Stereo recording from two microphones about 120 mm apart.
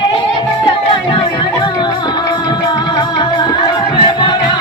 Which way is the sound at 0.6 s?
45° left (ahead or behind).